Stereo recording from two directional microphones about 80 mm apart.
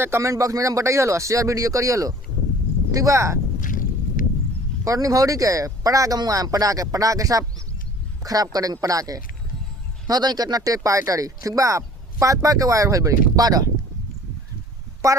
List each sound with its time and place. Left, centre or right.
0.0 s speech: right
4.9 s speech: right
15.0 s speech: right